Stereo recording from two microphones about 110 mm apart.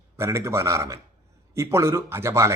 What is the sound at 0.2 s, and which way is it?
A man's voice, 25° right (ahead or behind).